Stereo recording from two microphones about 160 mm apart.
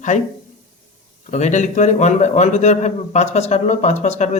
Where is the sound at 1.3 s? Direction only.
50° left (ahead or behind).